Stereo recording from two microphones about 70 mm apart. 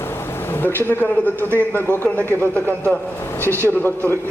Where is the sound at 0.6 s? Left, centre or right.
Left.